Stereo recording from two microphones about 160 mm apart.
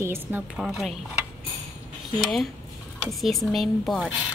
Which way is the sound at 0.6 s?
Centre (ahead or behind).